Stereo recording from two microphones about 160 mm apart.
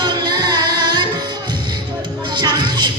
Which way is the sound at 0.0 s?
25° right (ahead or behind).